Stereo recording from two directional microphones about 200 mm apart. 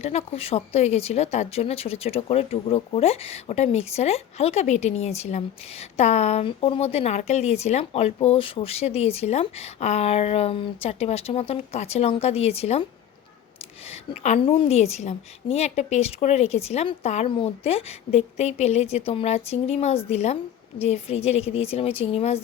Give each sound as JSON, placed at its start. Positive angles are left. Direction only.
{"t": 0.0, "sound": "speech", "side_deg": 30}
{"t": 13.8, "sound": "speech", "side_deg": 30}